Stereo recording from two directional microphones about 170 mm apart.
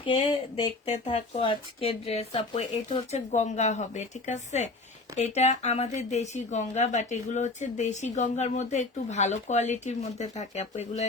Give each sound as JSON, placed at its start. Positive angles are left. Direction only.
{"t": 0.0, "sound": "speech", "side_deg": 30}